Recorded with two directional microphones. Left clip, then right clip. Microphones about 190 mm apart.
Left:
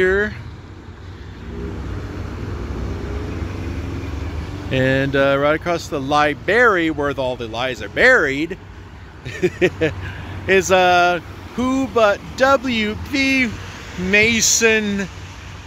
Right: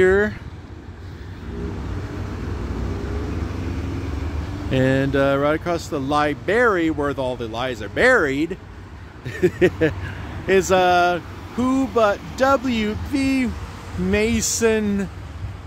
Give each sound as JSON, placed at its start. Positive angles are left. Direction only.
{"t": 0.0, "sound": "vehicle", "side_deg": -30}
{"t": 4.6, "sound": "speech", "side_deg": -20}